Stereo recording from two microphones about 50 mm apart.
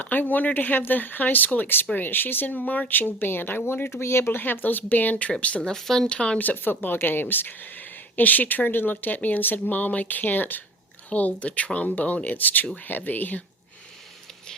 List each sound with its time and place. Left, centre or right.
0.0 s speech: left
4.4 s speech: left
5.7 s speech: centre
6.1 s speech: centre
6.4 s speech: left